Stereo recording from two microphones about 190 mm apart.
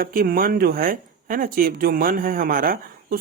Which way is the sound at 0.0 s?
50° right (ahead or behind).